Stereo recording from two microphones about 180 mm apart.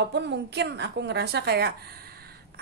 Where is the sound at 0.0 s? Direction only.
70° right (ahead or behind).